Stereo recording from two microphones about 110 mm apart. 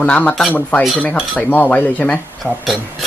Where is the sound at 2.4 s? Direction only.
5° left (ahead or behind).